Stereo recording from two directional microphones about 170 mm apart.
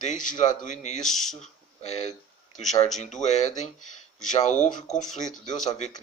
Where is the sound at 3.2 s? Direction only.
40° left (ahead or behind).